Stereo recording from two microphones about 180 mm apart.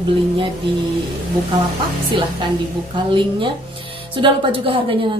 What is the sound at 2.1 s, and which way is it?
A woman's voice, 30° right (ahead or behind).